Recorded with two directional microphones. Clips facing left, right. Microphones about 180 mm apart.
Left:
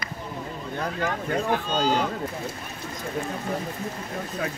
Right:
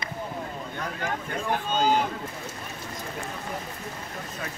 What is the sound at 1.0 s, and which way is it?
Speech, 40° left (ahead or behind).